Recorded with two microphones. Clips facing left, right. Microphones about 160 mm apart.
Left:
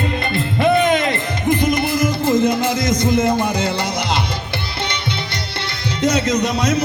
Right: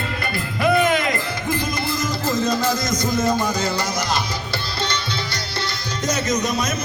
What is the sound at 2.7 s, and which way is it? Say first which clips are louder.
Speech: left 5 dB; 55° left (ahead or behind).